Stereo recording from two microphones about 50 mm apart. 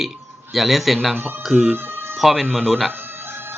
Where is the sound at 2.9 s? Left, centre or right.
Right.